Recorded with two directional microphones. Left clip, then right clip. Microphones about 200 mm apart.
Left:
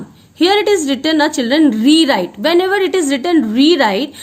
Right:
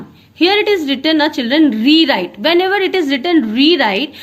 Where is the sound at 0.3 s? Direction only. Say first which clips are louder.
Even; 40° left (ahead or behind).